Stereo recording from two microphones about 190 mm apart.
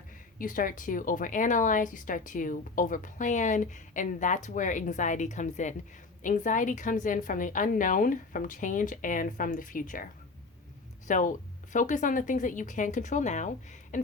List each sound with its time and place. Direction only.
0.3 s a woman's voice: 45° left (ahead or behind)
11.1 s speech: 40° left (ahead or behind)